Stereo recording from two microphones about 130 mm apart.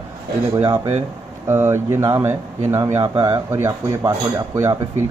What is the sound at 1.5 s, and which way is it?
Speech, 20° right (ahead or behind).